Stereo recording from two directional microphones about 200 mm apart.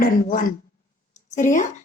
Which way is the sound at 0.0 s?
40° left (ahead or behind).